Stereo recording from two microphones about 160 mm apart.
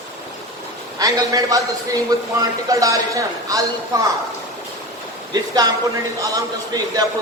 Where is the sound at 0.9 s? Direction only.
25° right (ahead or behind).